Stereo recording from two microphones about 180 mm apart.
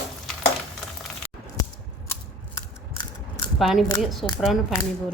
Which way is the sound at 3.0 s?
25° left (ahead or behind).